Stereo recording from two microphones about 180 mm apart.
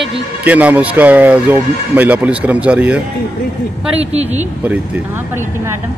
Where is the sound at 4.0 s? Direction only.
35° right (ahead or behind).